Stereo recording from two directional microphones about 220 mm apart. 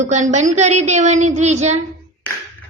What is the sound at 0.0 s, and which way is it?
A woman's voice, 35° right (ahead or behind).